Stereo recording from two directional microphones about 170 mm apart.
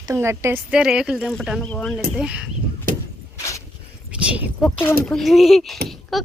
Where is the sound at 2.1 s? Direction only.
5° right (ahead or behind).